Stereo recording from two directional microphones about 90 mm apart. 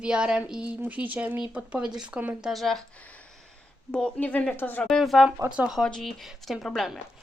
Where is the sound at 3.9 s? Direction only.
10° left (ahead or behind).